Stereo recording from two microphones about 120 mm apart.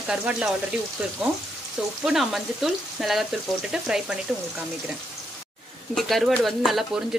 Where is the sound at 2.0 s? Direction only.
5° right (ahead or behind).